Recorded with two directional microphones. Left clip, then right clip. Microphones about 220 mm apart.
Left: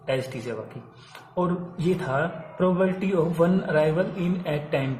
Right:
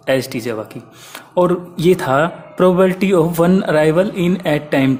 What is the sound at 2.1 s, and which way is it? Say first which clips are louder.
Speech: right 11 dB; 45° right (ahead or behind).